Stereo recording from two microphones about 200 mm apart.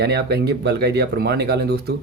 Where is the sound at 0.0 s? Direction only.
55° right (ahead or behind).